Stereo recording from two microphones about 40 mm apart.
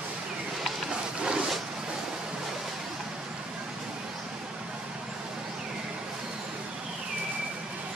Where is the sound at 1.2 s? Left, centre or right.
Centre.